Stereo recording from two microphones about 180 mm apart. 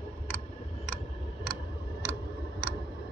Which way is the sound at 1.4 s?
Centre (ahead or behind).